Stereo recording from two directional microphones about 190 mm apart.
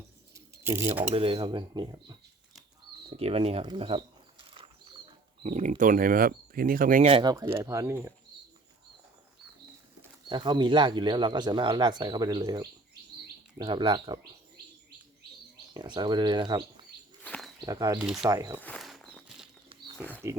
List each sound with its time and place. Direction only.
0.3 s bird: 15° right (ahead or behind)
1.1 s speech: 30° right (ahead or behind); by 7.1 s 45° right (ahead or behind)
7.1 s speech: 20° right (ahead or behind)
10.2 s speech: 25° right (ahead or behind)
15.7 s speech: 25° right (ahead or behind)
17.2 s bird: 5° left (ahead or behind)
17.6 s speech: 20° right (ahead or behind)
18.6 s walk: 5° left (ahead or behind)
20.0 s speech: 10° left (ahead or behind)